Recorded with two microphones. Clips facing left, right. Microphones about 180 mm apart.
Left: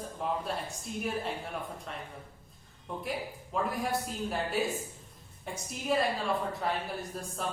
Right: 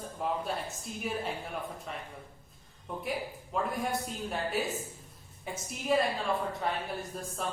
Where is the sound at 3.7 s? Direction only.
Centre (ahead or behind).